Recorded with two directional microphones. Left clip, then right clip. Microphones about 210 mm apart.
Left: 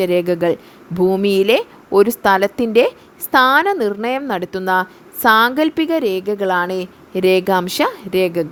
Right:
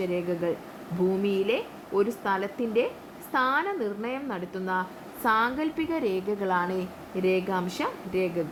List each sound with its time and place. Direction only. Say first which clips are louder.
0.0 s a woman's voice: left 13 dB; 50° left (ahead or behind)